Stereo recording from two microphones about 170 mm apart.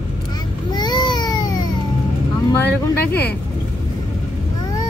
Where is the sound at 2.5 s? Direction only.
10° left (ahead or behind).